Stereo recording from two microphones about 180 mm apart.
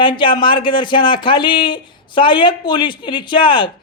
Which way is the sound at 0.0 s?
25° left (ahead or behind).